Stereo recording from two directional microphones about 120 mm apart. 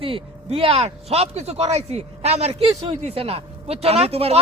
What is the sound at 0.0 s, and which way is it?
Speech, 50° right (ahead or behind).